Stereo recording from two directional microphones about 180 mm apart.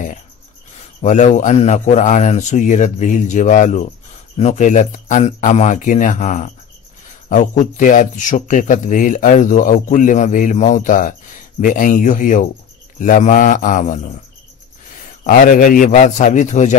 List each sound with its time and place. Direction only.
1.0 s speech: 40° left (ahead or behind)
15.2 s speech: 50° left (ahead or behind)